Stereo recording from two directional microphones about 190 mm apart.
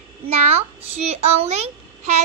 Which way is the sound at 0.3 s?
35° right (ahead or behind).